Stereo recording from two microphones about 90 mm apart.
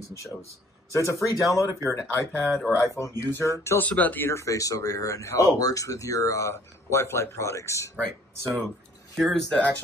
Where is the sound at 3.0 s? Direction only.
35° left (ahead or behind).